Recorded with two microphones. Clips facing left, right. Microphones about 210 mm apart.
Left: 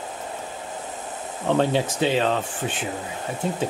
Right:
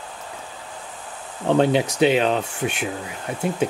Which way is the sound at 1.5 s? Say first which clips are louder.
Right 3 dB; 15° right (ahead or behind).